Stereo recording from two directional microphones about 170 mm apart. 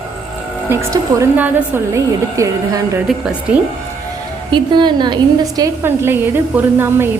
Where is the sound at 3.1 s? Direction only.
5° right (ahead or behind).